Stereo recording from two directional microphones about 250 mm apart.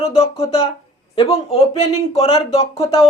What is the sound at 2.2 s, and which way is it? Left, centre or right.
Speech, left.